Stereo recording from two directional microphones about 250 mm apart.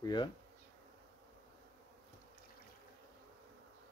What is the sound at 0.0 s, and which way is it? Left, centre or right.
Bee, centre.